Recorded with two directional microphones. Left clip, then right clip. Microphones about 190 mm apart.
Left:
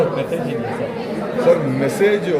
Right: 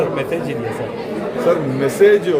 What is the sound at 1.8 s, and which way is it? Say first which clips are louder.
Speech: right 6 dB; 15° right (ahead or behind).